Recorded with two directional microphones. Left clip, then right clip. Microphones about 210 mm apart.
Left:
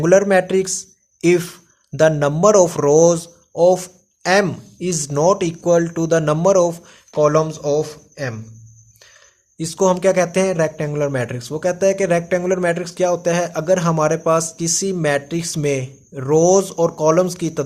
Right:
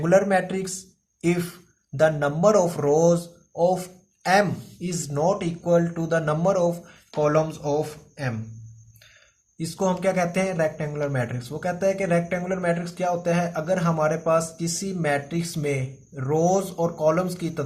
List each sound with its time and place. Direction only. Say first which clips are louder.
0.0 s speech: left 6 dB; 45° left (ahead or behind)
9.6 s speech: left 9 dB; 45° left (ahead or behind)